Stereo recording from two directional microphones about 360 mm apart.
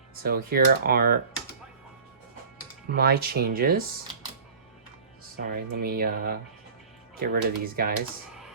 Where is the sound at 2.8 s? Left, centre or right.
Right.